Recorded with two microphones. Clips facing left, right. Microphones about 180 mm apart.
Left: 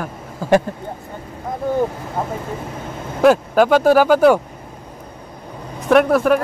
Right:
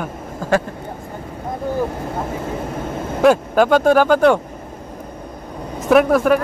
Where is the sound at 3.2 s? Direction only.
5° left (ahead or behind).